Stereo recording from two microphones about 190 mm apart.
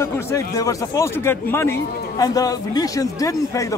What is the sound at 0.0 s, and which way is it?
A man's voice, 15° left (ahead or behind).